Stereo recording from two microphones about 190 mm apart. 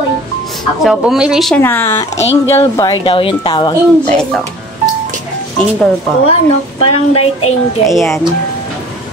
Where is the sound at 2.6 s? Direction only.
25° left (ahead or behind).